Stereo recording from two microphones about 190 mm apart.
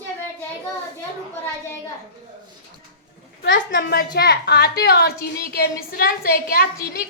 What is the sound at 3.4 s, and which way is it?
A woman's voice, 70° left (ahead or behind).